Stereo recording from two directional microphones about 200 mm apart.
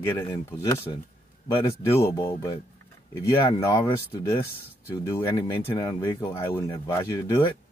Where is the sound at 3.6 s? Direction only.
15° left (ahead or behind).